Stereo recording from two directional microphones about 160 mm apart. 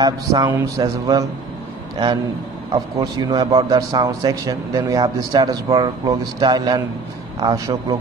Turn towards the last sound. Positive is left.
turn(degrees=-25)  # may be behind; listen again after turning